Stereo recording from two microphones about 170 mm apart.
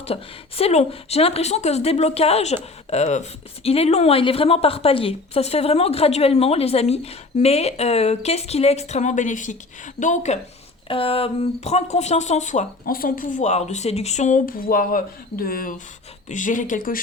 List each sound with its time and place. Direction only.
0.0 s speech: 35° left (ahead or behind)
10.8 s speech: 30° left (ahead or behind); by 17.0 s 55° left (ahead or behind)